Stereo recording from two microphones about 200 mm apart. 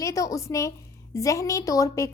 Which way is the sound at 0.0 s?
15° left (ahead or behind).